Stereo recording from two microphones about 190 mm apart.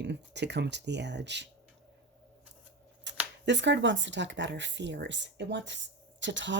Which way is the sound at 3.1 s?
70° right (ahead or behind).